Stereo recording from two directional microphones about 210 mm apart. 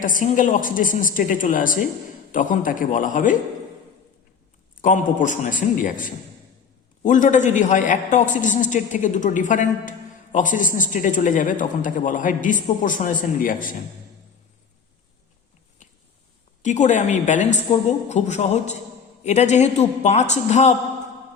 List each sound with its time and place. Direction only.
0.0 s a man's voice: 40° left (ahead or behind)
4.8 s a man's voice: 35° left (ahead or behind)
16.6 s a man's voice: 35° left (ahead or behind)